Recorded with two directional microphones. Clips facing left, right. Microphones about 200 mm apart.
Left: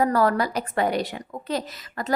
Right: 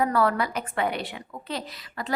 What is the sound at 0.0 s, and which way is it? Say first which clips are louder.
A woman's voice: left 3 dB; 40° left (ahead or behind).